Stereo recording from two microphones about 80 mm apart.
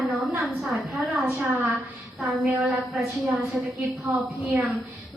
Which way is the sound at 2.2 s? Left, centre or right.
Centre.